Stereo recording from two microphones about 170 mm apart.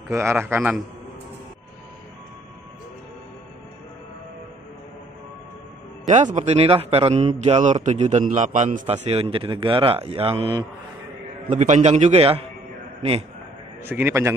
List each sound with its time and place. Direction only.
0.1 s a man's voice: 15° right (ahead or behind)
6.0 s a man's voice: 45° right (ahead or behind)
8.8 s speech: 35° right (ahead or behind)
11.5 s speech: 40° right (ahead or behind)
13.8 s a man's voice: 15° right (ahead or behind)